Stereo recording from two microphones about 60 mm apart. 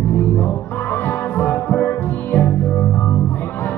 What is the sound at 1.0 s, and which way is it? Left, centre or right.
Music, left.